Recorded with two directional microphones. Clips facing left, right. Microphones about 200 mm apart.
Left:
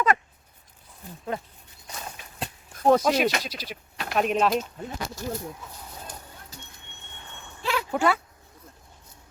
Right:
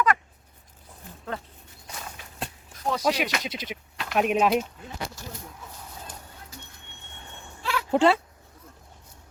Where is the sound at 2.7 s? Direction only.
55° left (ahead or behind).